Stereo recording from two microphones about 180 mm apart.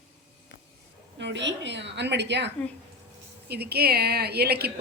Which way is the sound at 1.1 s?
80° right.